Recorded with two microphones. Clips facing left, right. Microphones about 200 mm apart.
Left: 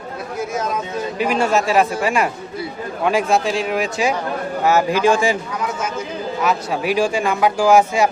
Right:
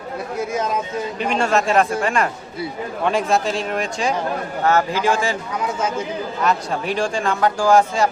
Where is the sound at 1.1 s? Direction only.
5° left (ahead or behind).